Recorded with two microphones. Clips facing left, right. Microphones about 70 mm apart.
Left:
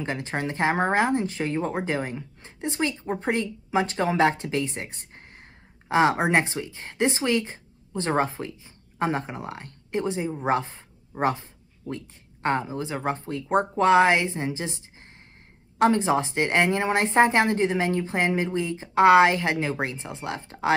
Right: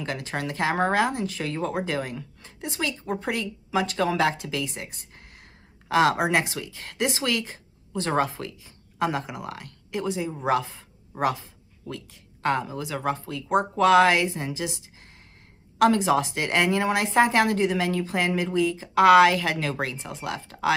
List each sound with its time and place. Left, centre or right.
0.0 s a woman's voice: left
15.8 s speech: left